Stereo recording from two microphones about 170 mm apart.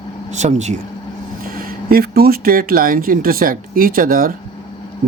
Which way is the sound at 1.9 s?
65° right (ahead or behind).